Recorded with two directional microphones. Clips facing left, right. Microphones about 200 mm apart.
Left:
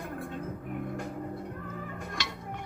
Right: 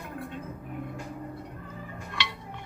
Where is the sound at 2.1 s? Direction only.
45° left (ahead or behind).